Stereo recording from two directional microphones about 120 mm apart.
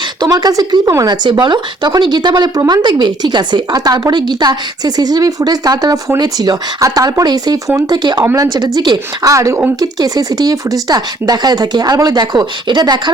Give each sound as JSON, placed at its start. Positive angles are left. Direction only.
{"t": 0.2, "sound": "speech", "side_deg": -35}